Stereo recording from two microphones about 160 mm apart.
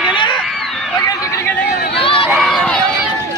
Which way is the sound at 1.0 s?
20° left (ahead or behind).